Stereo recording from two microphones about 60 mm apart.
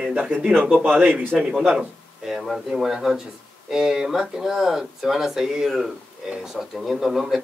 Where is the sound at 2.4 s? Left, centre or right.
Centre.